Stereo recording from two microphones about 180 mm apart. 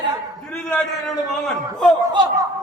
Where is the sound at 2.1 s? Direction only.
25° right (ahead or behind).